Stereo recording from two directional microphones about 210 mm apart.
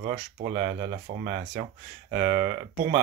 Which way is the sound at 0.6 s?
35° right (ahead or behind).